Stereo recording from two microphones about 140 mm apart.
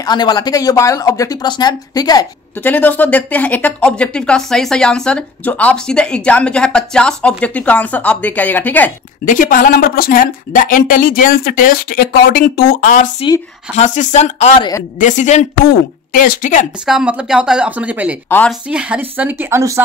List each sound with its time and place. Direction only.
0.0 s speech: 30° left (ahead or behind)
2.6 s speech: 10° left (ahead or behind)
9.2 s speech: 75° left (ahead or behind)
13.7 s speech: 60° left (ahead or behind)
15.6 s speech: 90° left; by 16.6 s 70° left (ahead or behind)
16.8 s speech: 5° right (ahead or behind)